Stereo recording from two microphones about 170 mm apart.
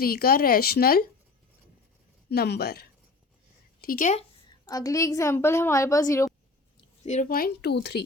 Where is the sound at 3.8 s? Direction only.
50° left (ahead or behind).